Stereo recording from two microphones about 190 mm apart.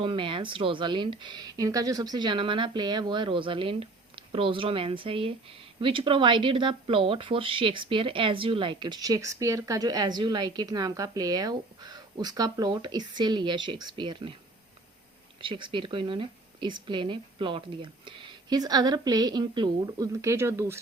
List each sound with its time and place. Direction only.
0.0 s speech: 25° right (ahead or behind)
15.4 s speech: 25° right (ahead or behind)